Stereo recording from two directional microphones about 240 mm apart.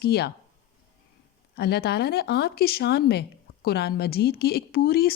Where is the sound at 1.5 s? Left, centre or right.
Left.